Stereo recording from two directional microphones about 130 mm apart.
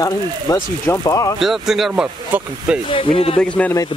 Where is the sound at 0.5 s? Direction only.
25° left (ahead or behind).